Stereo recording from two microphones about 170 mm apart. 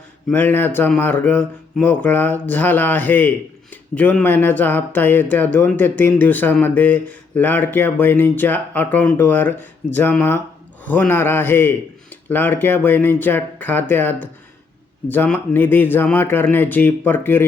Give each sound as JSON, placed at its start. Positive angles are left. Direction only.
{"t": 0.3, "sound": "speech", "side_deg": 10}